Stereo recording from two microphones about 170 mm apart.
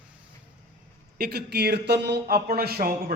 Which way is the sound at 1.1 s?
70° right (ahead or behind).